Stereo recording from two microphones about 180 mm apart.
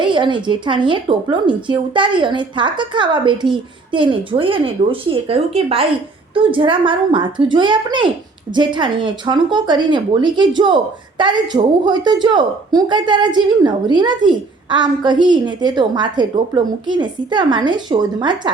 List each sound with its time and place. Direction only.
0.0 s speech: 25° right (ahead or behind)